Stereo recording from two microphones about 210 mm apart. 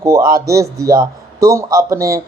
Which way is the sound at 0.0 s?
15° right (ahead or behind).